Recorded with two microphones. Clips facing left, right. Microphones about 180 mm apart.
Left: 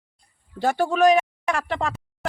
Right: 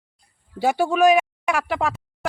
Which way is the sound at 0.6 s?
10° right (ahead or behind).